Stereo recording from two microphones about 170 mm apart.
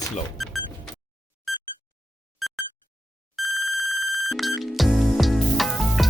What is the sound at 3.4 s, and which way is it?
Ringtone, centre (ahead or behind).